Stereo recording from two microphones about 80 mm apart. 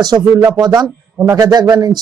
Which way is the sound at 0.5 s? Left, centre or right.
Right.